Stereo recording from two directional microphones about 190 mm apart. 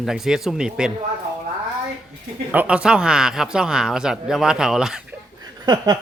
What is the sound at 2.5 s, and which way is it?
Speech, 5° right (ahead or behind).